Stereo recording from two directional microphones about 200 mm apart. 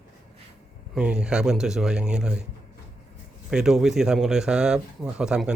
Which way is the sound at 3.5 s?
5° right (ahead or behind).